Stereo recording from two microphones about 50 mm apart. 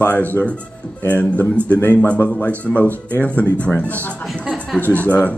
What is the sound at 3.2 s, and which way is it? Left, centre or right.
Speech, left.